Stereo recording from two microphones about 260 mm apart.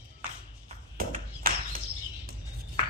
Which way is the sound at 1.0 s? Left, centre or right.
Right.